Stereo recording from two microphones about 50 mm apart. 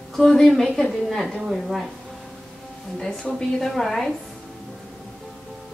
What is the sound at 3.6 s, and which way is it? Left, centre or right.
Speech, centre.